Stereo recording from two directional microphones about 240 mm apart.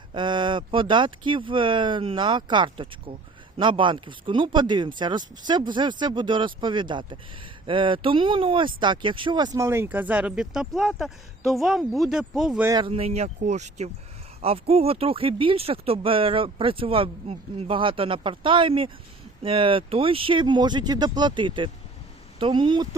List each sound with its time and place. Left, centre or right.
0.1 s speech: centre